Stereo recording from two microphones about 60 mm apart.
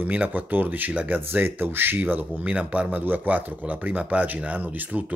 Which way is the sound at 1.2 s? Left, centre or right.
Right.